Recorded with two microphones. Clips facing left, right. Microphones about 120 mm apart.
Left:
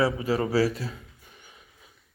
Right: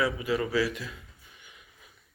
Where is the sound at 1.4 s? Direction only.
30° left (ahead or behind).